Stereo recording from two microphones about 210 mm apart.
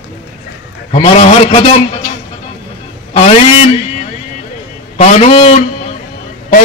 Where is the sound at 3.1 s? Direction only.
30° left (ahead or behind).